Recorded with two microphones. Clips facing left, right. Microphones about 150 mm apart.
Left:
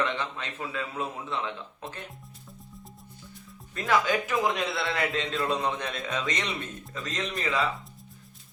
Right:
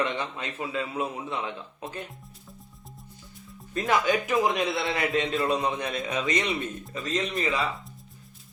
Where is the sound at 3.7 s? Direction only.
20° right (ahead or behind).